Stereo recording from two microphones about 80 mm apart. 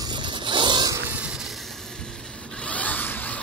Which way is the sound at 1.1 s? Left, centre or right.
Centre.